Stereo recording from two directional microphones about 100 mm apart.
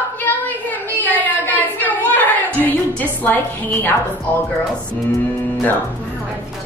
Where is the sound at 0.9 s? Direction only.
15° left (ahead or behind).